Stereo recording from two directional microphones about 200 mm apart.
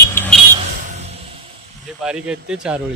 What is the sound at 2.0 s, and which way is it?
Speech, 5° right (ahead or behind).